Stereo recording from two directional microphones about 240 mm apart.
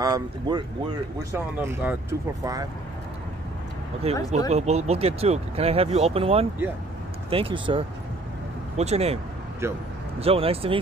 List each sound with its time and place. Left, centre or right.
0.0 s speech: centre
4.0 s speech: right
9.6 s speech: centre
10.2 s speech: right